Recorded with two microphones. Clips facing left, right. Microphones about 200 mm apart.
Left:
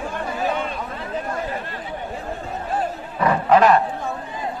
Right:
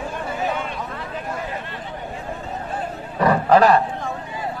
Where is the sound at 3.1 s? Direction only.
35° right (ahead or behind).